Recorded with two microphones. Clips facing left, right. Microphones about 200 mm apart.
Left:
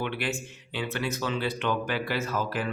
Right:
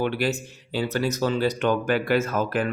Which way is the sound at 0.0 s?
40° right (ahead or behind).